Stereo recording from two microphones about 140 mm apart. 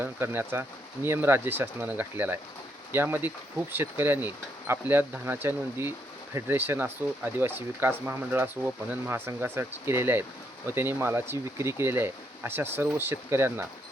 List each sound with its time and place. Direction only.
0.0 s speech: 15° right (ahead or behind)